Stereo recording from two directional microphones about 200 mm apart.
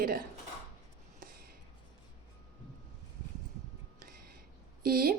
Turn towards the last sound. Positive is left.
turn(degrees=-45)  # may be behind; listen again after turning